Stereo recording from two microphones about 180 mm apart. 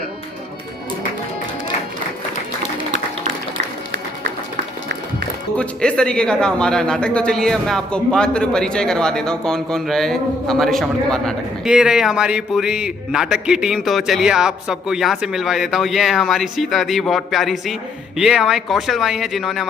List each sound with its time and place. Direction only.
3.6 s music: 75° right (ahead or behind)
5.5 s speech: 5° left (ahead or behind)